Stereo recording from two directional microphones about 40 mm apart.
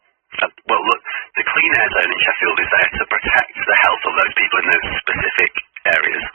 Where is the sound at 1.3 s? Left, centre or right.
Centre.